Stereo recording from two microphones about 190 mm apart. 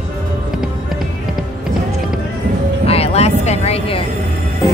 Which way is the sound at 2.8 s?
30° left (ahead or behind).